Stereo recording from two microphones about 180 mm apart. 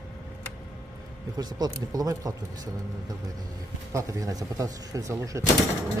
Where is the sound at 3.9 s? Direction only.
15° right (ahead or behind).